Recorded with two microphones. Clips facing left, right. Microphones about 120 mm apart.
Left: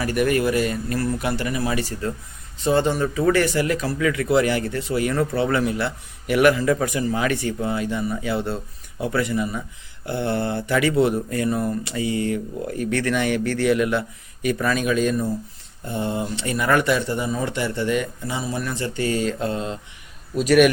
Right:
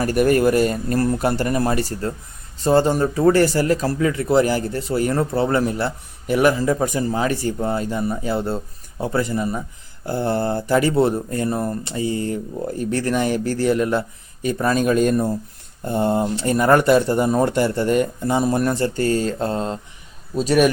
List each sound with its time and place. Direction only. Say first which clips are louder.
0.0 s speech: right 4 dB; 40° right (ahead or behind)